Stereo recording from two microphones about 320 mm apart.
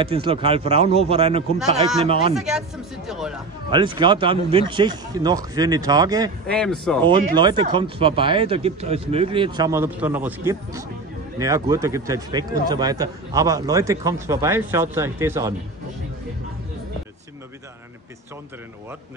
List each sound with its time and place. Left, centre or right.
0.0 s speech: centre
2.3 s speech: centre
3.7 s speech: centre
6.4 s speech: centre
7.1 s speech: centre